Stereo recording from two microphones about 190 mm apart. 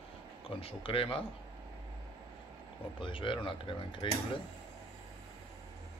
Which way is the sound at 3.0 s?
25° left (ahead or behind).